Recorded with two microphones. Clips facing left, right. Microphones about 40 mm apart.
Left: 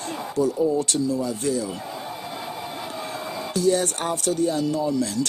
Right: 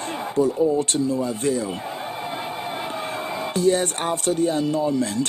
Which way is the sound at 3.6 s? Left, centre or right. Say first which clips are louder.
Right 1 dB; right.